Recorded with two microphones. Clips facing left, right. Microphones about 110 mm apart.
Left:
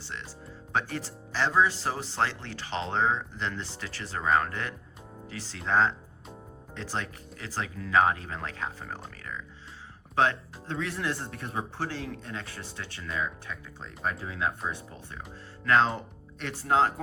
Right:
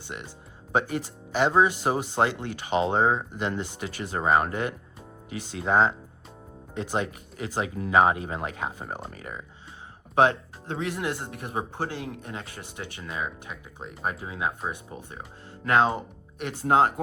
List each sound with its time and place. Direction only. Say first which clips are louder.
0.7 s speech: right 5 dB; 15° right (ahead or behind)
10.2 s speech: right 5 dB; 20° right (ahead or behind)